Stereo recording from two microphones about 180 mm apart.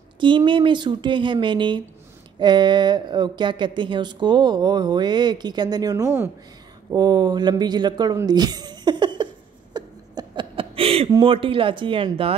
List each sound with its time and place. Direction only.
0.2 s speech: 25° right (ahead or behind)
9.8 s a sound: 25° right (ahead or behind)
11.1 s speech: 25° right (ahead or behind)